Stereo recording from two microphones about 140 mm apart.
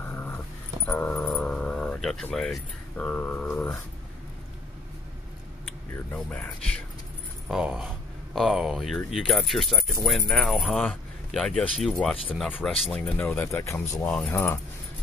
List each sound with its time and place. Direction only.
0.0 s dog: 15° left (ahead or behind)
0.8 s a sound: 10° left (ahead or behind)
2.2 s speech: 5° left (ahead or behind)
5.7 s speech: 10° left (ahead or behind)
7.4 s speech: 5° right (ahead or behind); by 14.0 s 20° left (ahead or behind)
14.0 s speech: 5° left (ahead or behind)
14.3 s speech: 15° left (ahead or behind)